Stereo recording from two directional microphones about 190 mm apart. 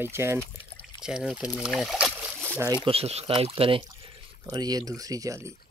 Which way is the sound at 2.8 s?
30° right (ahead or behind).